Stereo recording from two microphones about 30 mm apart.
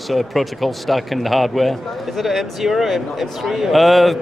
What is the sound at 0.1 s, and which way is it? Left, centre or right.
Speech, centre.